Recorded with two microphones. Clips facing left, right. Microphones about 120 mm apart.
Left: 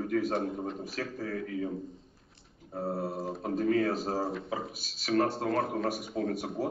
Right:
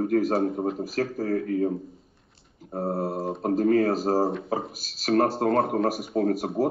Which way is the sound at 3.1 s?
35° right (ahead or behind).